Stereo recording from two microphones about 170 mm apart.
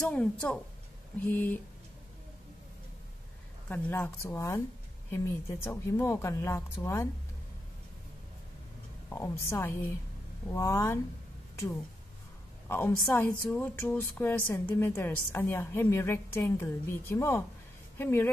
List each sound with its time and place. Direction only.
0.0 s a woman's voice: 5° left (ahead or behind)
3.6 s a woman's voice: 10° left (ahead or behind)
9.1 s a woman's voice: 15° left (ahead or behind)
12.6 s a woman's voice: 15° left (ahead or behind)